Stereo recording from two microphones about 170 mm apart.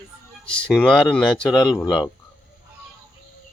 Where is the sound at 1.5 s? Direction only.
25° left (ahead or behind).